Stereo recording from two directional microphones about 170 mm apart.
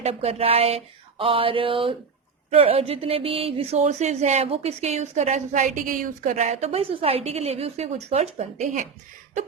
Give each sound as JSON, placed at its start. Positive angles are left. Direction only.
{"t": 0.0, "sound": "speech", "side_deg": -35}